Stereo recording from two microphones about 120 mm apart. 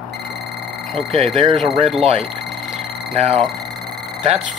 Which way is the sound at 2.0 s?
55° right (ahead or behind).